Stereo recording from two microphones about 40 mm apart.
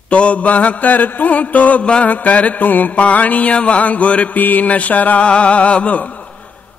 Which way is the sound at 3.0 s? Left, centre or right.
Left.